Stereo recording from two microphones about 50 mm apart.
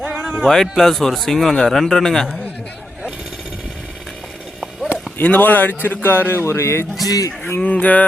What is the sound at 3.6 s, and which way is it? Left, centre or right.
Chainsaw, centre.